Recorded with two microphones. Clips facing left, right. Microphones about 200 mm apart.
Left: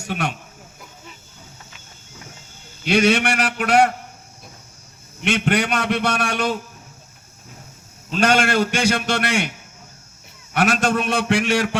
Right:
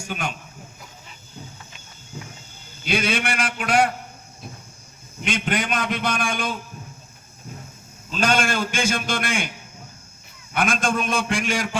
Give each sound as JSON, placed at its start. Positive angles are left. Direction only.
{"t": 0.0, "sound": "speech", "side_deg": 75}
{"t": 2.8, "sound": "a man's voice", "side_deg": 70}
{"t": 5.2, "sound": "a man's voice", "side_deg": 70}
{"t": 8.1, "sound": "a man's voice", "side_deg": 70}
{"t": 10.5, "sound": "a man's voice", "side_deg": 75}